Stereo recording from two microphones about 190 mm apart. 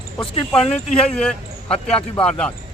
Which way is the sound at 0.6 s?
35° left (ahead or behind).